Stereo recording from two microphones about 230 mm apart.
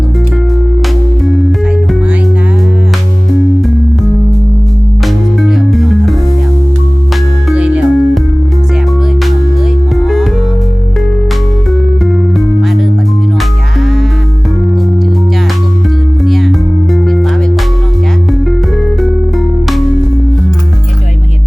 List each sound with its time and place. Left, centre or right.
5.4 s music: centre
7.5 s music: centre
16.2 s music: centre